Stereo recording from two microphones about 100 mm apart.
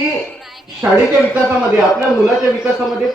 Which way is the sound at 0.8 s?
25° right (ahead or behind).